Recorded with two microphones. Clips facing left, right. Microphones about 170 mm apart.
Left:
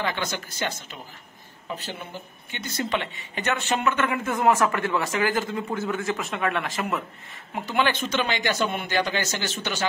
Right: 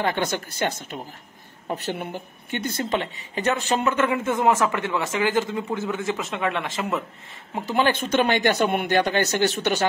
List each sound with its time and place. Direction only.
0.0 s speech: 55° right (ahead or behind)
2.8 s speech: 40° right (ahead or behind); by 6.9 s 20° right (ahead or behind)
7.6 s speech: 40° right (ahead or behind); by 9.8 s 60° right (ahead or behind)